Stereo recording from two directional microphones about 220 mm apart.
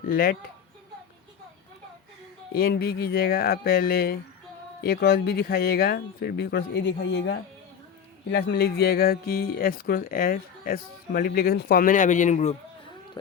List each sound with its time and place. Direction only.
0.1 s speech: 40° left (ahead or behind)
2.5 s speech: 45° left (ahead or behind)